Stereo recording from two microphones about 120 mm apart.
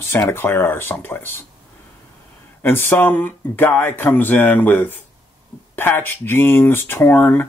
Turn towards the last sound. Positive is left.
turn(degrees=15)  # may be behind; listen again after turning